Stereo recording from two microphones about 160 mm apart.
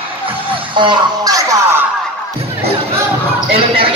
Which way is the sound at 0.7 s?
30° right (ahead or behind).